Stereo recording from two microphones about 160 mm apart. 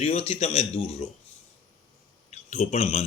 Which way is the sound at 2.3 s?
45° left (ahead or behind).